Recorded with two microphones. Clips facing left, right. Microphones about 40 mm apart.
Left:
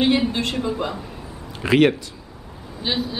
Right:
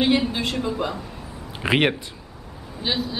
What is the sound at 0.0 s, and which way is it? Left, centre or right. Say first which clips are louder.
A man's voice: left 1 dB; centre.